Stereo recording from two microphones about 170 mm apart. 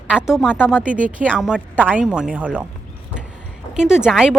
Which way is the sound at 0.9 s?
50° right (ahead or behind).